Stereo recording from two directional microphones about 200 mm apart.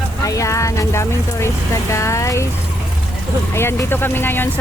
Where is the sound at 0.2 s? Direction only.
15° left (ahead or behind).